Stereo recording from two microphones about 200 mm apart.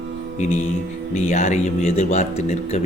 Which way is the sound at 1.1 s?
35° left (ahead or behind).